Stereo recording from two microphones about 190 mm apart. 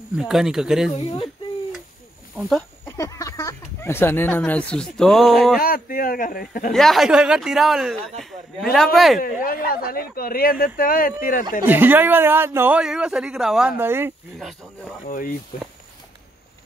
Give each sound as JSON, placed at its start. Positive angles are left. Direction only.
{"t": 0.2, "sound": "a man's voice", "side_deg": 0}
{"t": 0.9, "sound": "speech", "side_deg": 30}
{"t": 2.8, "sound": "speech", "side_deg": 15}
{"t": 5.6, "sound": "a man's voice", "side_deg": 50}
{"t": 6.7, "sound": "a man's voice", "side_deg": 0}
{"t": 8.2, "sound": "a sound", "side_deg": 0}
{"t": 8.7, "sound": "a man's voice", "side_deg": 0}
{"t": 9.2, "sound": "a man's voice", "side_deg": 50}
{"t": 11.6, "sound": "a man's voice", "side_deg": -10}
{"t": 15.0, "sound": "a man's voice", "side_deg": 45}